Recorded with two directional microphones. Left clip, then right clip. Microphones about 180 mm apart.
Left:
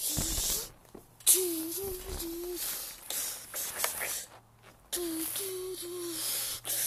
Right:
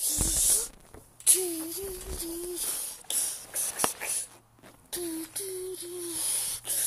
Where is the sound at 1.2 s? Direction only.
10° left (ahead or behind).